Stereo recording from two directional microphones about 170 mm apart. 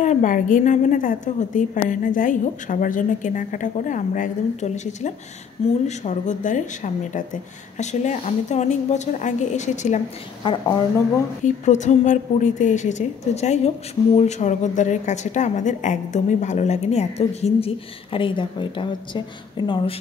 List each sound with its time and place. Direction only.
0.0 s a woman's voice: 45° left (ahead or behind)
10.4 s a woman's voice: 25° left (ahead or behind)
11.4 s a woman's voice: 45° left (ahead or behind); by 20.0 s 30° left (ahead or behind)